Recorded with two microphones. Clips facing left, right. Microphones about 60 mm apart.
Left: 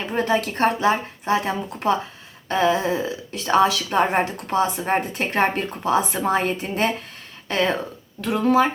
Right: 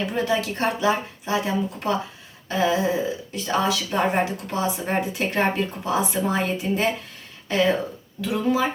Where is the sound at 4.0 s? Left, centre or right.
Left.